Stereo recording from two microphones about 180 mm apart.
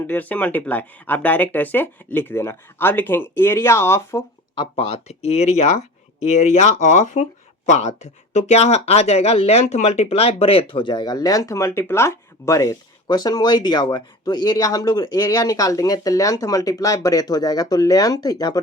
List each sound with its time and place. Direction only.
0.1 s speech: 10° left (ahead or behind)
4.5 s speech: 30° left (ahead or behind)